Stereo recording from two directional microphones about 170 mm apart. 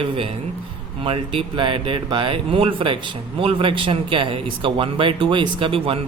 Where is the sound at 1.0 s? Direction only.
35° right (ahead or behind).